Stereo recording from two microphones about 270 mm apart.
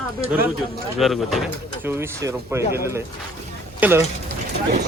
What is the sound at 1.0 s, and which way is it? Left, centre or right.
Speech, centre.